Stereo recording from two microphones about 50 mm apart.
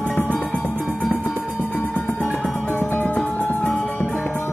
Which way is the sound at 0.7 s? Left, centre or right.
Right.